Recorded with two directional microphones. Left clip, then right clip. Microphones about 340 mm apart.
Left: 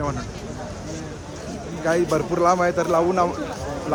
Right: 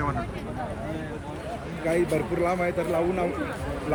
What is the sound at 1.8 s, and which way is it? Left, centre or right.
A man's voice, centre.